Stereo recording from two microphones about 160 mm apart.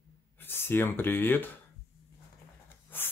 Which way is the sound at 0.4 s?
15° left (ahead or behind).